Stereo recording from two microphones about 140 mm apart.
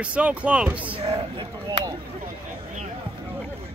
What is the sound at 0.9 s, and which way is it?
Speech, 40° right (ahead or behind).